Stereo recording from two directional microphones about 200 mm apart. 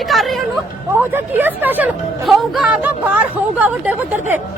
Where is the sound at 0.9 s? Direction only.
10° right (ahead or behind).